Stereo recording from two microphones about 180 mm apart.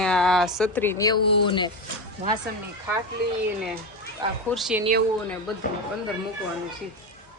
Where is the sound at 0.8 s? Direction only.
15° left (ahead or behind).